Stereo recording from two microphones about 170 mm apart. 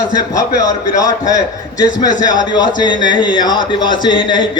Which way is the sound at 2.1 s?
45° left (ahead or behind).